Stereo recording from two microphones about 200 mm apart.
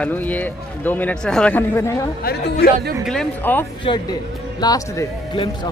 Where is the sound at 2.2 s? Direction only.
50° left (ahead or behind).